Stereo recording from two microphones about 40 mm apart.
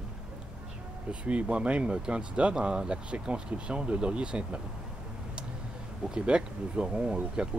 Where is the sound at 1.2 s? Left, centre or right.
Right.